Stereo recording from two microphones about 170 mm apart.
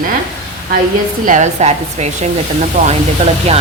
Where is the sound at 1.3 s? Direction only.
45° right (ahead or behind).